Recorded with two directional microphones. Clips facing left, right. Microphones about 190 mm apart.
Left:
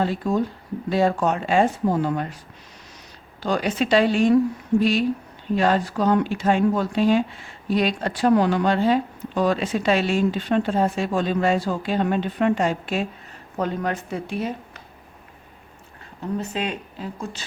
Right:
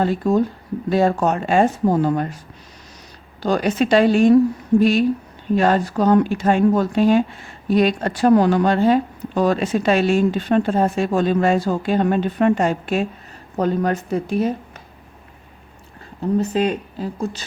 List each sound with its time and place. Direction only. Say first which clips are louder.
0.0 s speech: right 4 dB; 45° right (ahead or behind)
3.4 s speech: right 4 dB; 45° right (ahead or behind)
16.4 s speech: right 8 dB; 40° right (ahead or behind)